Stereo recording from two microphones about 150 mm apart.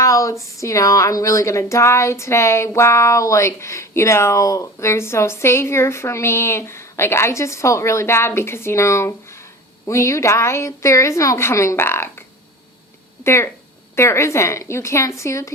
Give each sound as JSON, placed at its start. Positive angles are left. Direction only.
{"t": 0.0, "sound": "a sound", "side_deg": 20}
{"t": 0.5, "sound": "speech", "side_deg": 20}
{"t": 13.2, "sound": "speech", "side_deg": 15}